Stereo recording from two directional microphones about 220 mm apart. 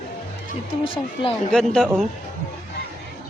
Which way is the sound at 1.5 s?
5° left (ahead or behind).